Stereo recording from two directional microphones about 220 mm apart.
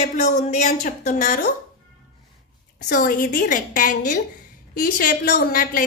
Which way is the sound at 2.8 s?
40° left (ahead or behind).